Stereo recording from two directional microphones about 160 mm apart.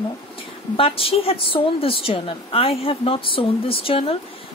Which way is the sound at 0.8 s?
35° left (ahead or behind).